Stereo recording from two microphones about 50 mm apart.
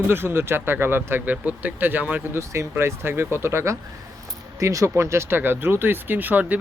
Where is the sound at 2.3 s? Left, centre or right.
Right.